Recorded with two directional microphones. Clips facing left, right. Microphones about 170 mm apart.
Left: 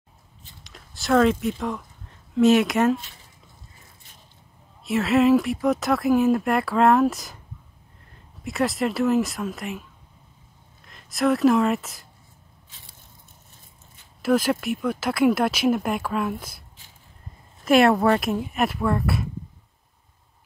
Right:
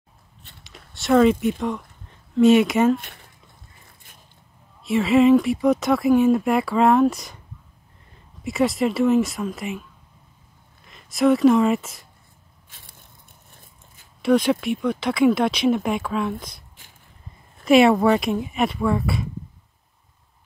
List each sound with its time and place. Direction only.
0.7 s a sound: centre (ahead or behind)
2.3 s speech: centre (ahead or behind)
3.0 s speech: 60° right (ahead or behind)
4.8 s speech: centre (ahead or behind)
8.5 s speech: centre (ahead or behind)
10.9 s speech: centre (ahead or behind)
14.2 s speech: centre (ahead or behind)
17.6 s speech: centre (ahead or behind)